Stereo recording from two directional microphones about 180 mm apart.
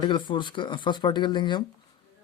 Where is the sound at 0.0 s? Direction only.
25° left (ahead or behind).